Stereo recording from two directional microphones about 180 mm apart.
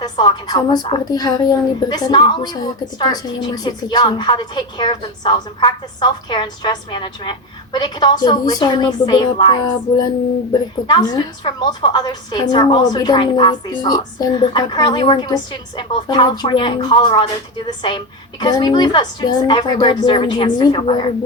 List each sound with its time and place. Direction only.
0.0 s a woman's voice: 25° left (ahead or behind)